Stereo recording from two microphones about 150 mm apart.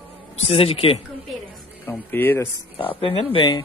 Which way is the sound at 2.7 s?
35° left (ahead or behind).